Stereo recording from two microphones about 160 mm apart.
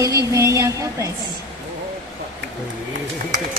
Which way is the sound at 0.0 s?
20° right (ahead or behind).